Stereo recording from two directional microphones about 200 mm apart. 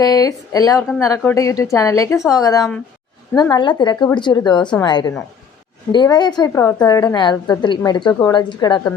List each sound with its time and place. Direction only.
0.0 s a woman's voice: 20° left (ahead or behind)